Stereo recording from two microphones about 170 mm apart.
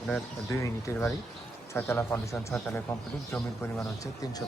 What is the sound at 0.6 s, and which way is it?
Speech, 15° left (ahead or behind).